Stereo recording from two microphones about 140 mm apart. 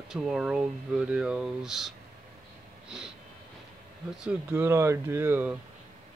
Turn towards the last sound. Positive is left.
turn(degrees=-15)  # may be behind; listen again after turning